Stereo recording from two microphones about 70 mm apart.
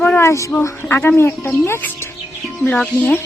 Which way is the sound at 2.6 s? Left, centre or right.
Left.